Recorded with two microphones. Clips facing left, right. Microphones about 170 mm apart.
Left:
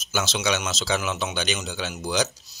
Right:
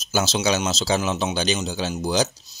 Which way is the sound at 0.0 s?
35° right (ahead or behind).